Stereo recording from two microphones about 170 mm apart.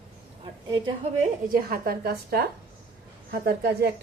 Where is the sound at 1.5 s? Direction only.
60° right (ahead or behind).